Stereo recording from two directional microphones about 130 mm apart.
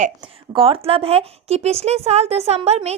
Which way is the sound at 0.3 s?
45° right (ahead or behind).